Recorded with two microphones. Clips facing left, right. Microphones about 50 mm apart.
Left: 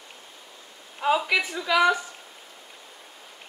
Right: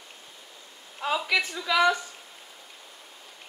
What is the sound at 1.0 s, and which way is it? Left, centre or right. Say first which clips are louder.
A woman's voice: left 3 dB; centre.